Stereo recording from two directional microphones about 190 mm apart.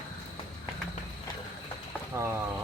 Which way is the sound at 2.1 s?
15° right (ahead or behind).